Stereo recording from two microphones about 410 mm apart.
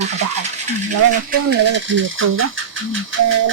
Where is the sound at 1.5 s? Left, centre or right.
Right.